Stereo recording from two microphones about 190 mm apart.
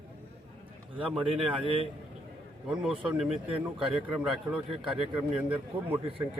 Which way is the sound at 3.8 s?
Centre (ahead or behind).